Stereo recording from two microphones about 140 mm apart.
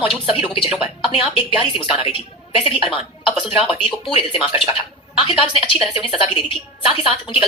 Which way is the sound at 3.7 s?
40° left (ahead or behind).